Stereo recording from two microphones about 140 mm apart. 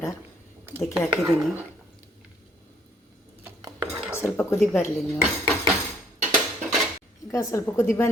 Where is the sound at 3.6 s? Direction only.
25° right (ahead or behind).